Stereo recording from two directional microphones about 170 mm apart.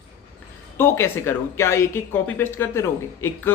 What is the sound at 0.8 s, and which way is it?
Speech, 15° left (ahead or behind).